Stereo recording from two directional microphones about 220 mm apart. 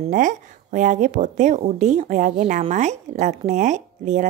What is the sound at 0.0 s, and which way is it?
Speech, 35° right (ahead or behind).